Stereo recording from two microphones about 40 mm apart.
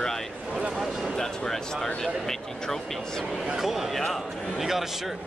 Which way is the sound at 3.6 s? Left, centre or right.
Centre.